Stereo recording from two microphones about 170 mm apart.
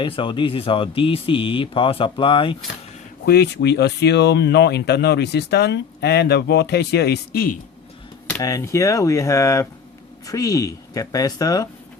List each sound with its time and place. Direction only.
0.0 s speech: 30° left (ahead or behind)
3.2 s speech: 75° left (ahead or behind)
8.4 s speech: 20° left (ahead or behind)